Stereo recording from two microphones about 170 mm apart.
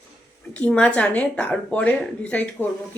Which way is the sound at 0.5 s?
5° left (ahead or behind).